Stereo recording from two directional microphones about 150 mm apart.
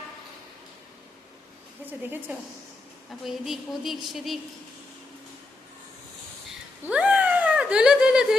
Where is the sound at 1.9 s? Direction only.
10° right (ahead or behind).